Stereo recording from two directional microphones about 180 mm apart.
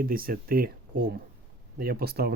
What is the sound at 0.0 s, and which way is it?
Speech, 55° right (ahead or behind).